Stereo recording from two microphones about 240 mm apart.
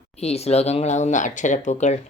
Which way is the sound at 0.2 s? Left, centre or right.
Left.